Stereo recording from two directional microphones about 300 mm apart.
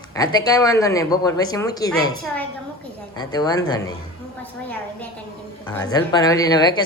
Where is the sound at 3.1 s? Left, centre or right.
Centre.